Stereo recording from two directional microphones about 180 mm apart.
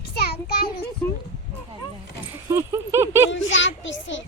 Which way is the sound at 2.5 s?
15° right (ahead or behind).